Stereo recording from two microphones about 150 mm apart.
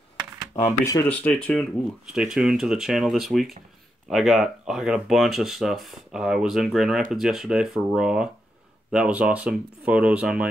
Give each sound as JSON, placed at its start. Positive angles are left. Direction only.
{"t": 0.5, "sound": "speech", "side_deg": 20}
{"t": 1.0, "sound": "speech", "side_deg": 10}
{"t": 2.0, "sound": "speech", "side_deg": -5}